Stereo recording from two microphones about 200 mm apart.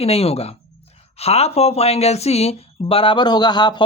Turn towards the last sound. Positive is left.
turn(degrees=20)  # may be behind; listen again after turning